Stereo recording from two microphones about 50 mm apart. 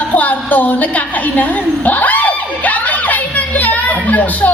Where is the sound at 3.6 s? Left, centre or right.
Left.